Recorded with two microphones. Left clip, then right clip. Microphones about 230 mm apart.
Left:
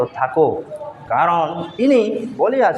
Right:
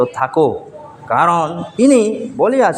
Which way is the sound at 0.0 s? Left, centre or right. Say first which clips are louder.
Right 2 dB; right.